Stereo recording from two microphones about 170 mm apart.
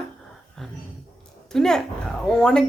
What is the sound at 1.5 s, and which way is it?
A woman's voice, 5° left (ahead or behind).